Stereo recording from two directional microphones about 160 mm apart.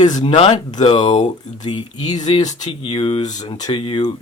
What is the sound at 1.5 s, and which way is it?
Speech, 30° left (ahead or behind).